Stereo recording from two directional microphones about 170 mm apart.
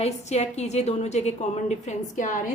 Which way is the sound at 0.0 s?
40° left (ahead or behind).